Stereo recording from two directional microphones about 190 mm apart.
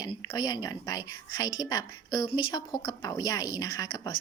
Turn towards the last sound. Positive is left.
turn(degrees=20)  # may be behind; listen again after turning